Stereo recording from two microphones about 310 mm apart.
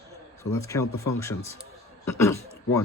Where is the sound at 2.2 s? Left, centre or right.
Centre.